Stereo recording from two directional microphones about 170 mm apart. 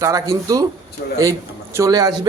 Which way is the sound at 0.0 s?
20° right (ahead or behind).